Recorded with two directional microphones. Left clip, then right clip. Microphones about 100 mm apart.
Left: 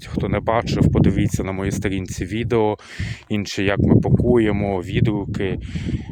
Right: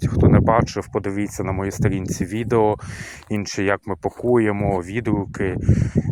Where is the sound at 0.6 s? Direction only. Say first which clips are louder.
Left 4 dB; 60° left (ahead or behind).